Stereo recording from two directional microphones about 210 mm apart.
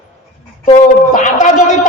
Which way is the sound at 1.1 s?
35° left (ahead or behind).